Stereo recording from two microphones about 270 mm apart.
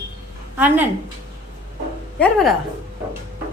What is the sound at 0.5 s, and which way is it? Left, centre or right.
Speech, centre.